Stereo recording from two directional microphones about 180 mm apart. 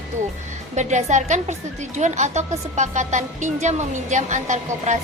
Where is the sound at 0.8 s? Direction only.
40° right (ahead or behind).